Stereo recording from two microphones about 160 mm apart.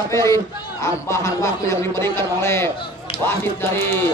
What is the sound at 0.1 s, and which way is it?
A man's voice, 20° left (ahead or behind).